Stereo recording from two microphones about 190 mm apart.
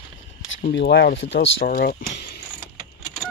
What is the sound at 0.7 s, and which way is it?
Speech, 65° left (ahead or behind).